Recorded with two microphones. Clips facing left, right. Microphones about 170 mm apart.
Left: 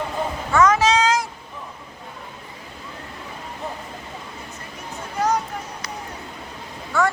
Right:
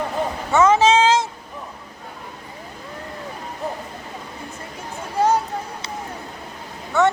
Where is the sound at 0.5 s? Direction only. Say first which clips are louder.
Right 2 dB; 25° right (ahead or behind).